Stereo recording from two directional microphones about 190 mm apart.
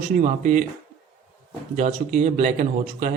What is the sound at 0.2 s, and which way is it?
Speech, 40° right (ahead or behind).